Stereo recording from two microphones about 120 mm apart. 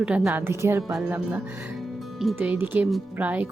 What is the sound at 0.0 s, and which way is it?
Speech, 10° right (ahead or behind).